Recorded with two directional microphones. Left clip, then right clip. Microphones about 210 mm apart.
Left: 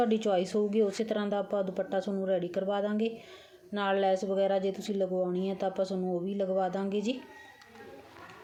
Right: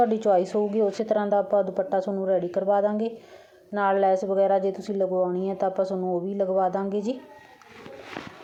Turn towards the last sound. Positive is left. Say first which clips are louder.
# right 6 dB
turn(degrees=-5)  # may be behind; listen again after turning